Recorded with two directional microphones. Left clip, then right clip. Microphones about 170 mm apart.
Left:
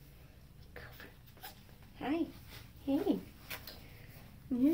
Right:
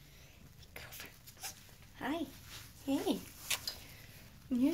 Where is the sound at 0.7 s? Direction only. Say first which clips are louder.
Right 2 dB; 5° right (ahead or behind).